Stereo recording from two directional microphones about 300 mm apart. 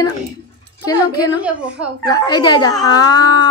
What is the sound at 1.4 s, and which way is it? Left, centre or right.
Speech, centre.